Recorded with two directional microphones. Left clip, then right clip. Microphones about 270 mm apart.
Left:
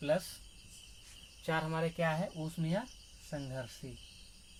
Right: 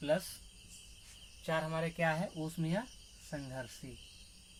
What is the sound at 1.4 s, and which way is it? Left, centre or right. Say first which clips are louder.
Speech: left 1 dB; left.